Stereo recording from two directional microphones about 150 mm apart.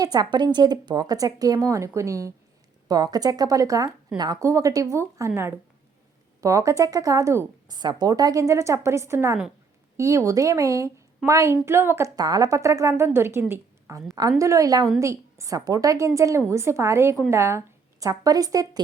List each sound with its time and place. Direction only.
0.0 s speech: 25° right (ahead or behind)
13.5 s a sound: 20° right (ahead or behind)
14.2 s speech: 20° right (ahead or behind)